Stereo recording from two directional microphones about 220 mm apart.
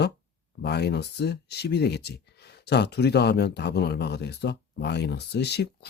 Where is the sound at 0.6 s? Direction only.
50° left (ahead or behind).